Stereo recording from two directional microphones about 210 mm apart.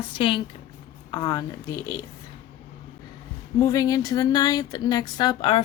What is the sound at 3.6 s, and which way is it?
A woman's voice, 15° left (ahead or behind).